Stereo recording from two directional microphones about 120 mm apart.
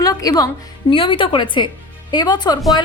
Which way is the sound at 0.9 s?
45° left (ahead or behind).